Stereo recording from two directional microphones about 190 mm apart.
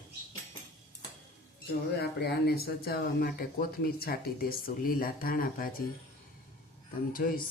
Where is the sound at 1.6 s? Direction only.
55° left (ahead or behind).